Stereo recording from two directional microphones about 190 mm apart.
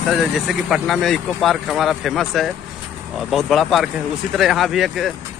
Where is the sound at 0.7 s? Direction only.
Centre (ahead or behind).